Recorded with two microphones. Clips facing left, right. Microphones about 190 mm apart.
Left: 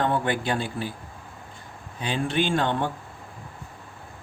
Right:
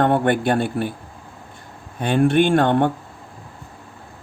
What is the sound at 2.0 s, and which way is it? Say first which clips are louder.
Speech: right 9 dB; 55° right (ahead or behind).